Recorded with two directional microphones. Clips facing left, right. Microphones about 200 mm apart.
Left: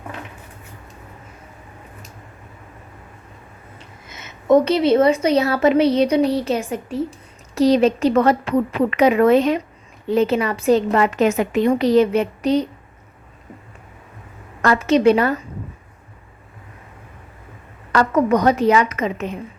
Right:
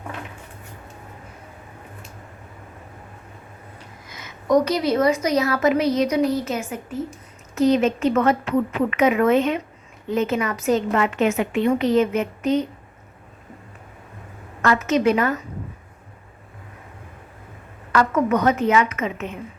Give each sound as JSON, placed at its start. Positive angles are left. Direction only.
{"t": 4.1, "sound": "a woman's voice", "side_deg": 25}
{"t": 14.6, "sound": "a woman's voice", "side_deg": 35}
{"t": 17.9, "sound": "a woman's voice", "side_deg": 35}